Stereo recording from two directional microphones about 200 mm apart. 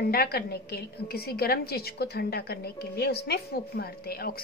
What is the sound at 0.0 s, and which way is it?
A woman's voice, 50° left (ahead or behind).